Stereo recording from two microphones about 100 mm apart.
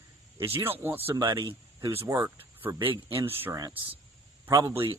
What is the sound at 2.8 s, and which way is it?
Speech, 60° right (ahead or behind).